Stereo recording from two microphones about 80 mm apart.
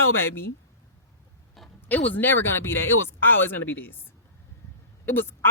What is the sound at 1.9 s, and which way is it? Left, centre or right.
Speech, left.